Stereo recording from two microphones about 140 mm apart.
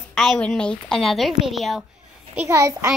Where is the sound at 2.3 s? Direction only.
20° right (ahead or behind).